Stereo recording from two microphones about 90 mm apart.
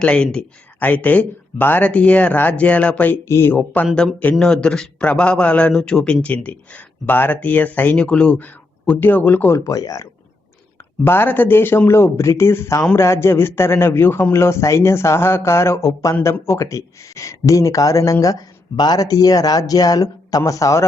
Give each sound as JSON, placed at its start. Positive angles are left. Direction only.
{"t": 0.0, "sound": "speech", "side_deg": 10}
{"t": 9.6, "sound": "speech", "side_deg": 40}
{"t": 11.0, "sound": "speech", "side_deg": 25}